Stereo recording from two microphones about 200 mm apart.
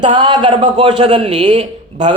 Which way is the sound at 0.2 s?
25° right (ahead or behind).